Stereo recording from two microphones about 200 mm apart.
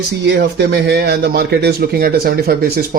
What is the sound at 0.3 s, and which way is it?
Speech, 60° right (ahead or behind).